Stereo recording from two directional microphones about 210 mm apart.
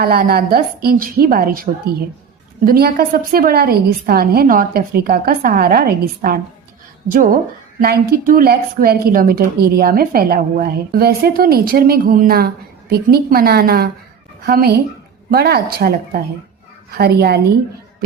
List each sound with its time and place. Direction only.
0.0 s a woman's voice: 45° right (ahead or behind)
2.6 s a woman's voice: 45° right (ahead or behind)
17.0 s a woman's voice: 50° right (ahead or behind)